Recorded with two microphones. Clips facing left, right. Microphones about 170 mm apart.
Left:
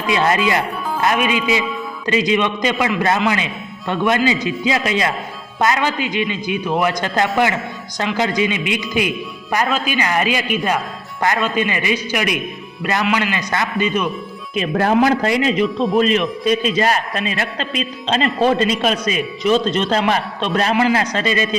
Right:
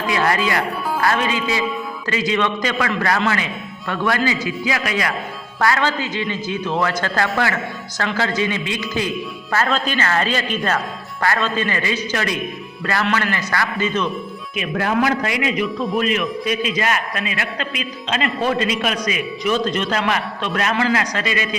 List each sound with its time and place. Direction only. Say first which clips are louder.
0.1 s a man's voice: left 3 dB; 20° left (ahead or behind)
14.5 s a man's voice: left 5 dB; 35° left (ahead or behind)